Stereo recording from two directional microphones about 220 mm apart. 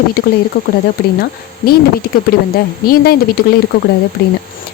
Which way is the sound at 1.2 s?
45° left (ahead or behind).